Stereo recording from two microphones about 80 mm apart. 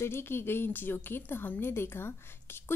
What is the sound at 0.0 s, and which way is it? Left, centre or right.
A woman's voice, left.